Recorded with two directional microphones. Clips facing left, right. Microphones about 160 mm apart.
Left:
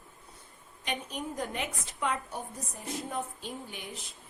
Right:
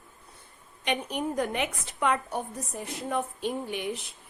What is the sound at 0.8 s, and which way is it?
A woman's voice, 70° right (ahead or behind).